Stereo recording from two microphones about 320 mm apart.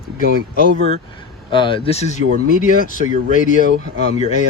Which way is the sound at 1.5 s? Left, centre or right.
Centre.